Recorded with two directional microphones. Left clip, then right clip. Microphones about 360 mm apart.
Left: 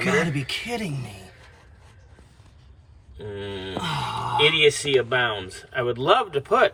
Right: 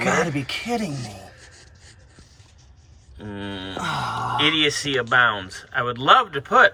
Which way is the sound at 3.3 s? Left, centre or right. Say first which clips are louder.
Right 1 dB; centre.